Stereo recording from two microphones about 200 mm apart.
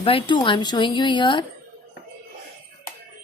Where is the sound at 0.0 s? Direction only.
25° left (ahead or behind).